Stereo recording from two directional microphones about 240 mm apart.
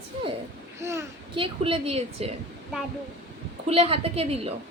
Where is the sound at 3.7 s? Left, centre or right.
Right.